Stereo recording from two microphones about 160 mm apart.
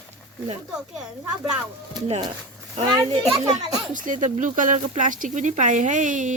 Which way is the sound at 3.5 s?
55° right (ahead or behind).